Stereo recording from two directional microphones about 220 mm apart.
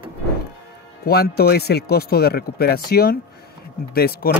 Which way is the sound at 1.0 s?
45° left (ahead or behind).